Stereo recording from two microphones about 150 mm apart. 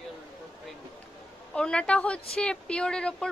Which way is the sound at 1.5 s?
5° left (ahead or behind).